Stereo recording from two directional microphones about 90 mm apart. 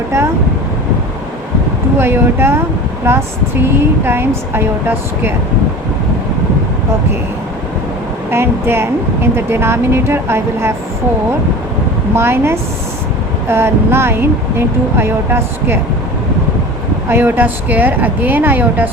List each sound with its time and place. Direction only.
2.0 s speech: 25° right (ahead or behind)
8.3 s speech: 25° right (ahead or behind)
12.1 s speech: 25° right (ahead or behind)
17.1 s speech: 25° right (ahead or behind)